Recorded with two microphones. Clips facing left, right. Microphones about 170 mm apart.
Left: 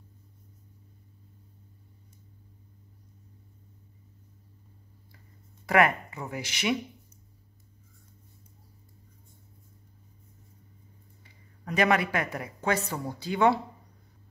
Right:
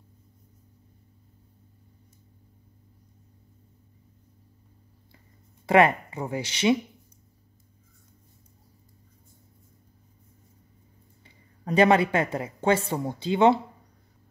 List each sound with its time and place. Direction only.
5.7 s speech: 25° right (ahead or behind)
11.2 s speech: 30° right (ahead or behind)